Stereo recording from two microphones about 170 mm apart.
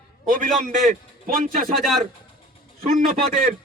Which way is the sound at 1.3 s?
55° right (ahead or behind).